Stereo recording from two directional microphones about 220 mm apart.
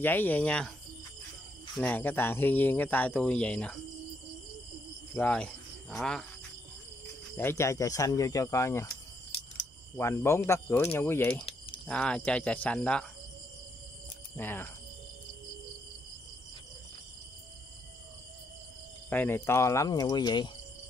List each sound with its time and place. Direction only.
0.0 s speech: 10° left (ahead or behind)
1.8 s speech: 10° left (ahead or behind)
5.1 s speech: 5° left (ahead or behind)
7.3 s speech: 10° left (ahead or behind)
9.9 s speech: 10° left (ahead or behind)
14.3 s speech: 10° left (ahead or behind)
19.0 s speech: 10° left (ahead or behind)